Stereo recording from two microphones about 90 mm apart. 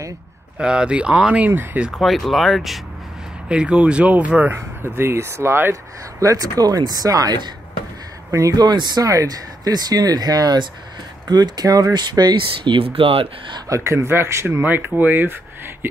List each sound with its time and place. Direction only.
0.6 s speech: 10° right (ahead or behind)
2.0 s speech: centre (ahead or behind)
3.4 s speech: 10° right (ahead or behind)
4.6 s speech: 25° right (ahead or behind); by 7.5 s 50° right (ahead or behind)
8.3 s speech: 35° right (ahead or behind); by 13.6 s 85° right
13.7 s speech: 35° right (ahead or behind)